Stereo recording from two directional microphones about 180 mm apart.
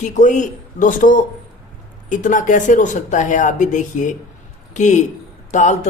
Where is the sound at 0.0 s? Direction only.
45° left (ahead or behind).